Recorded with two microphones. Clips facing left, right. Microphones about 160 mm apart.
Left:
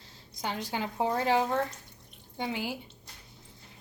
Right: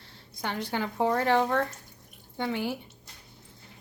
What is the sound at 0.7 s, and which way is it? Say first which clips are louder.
Speech: right 4 dB; 15° left (ahead or behind).